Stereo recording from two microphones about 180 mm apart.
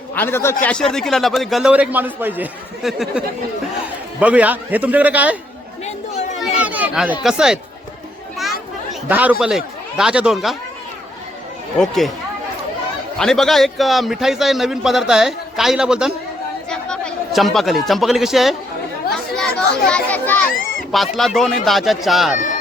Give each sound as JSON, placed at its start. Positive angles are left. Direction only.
{"t": 0.1, "sound": "a man's voice", "side_deg": 10}
{"t": 5.8, "sound": "chatter", "side_deg": 40}
{"t": 6.6, "sound": "speech", "side_deg": -10}
{"t": 8.9, "sound": "chatter", "side_deg": -10}
{"t": 9.4, "sound": "a man's voice", "side_deg": -5}
{"t": 11.8, "sound": "a man's voice", "side_deg": 0}
{"t": 13.1, "sound": "a man's voice", "side_deg": 5}